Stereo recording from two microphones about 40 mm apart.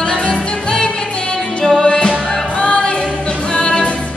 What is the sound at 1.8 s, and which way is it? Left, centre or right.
Music, left.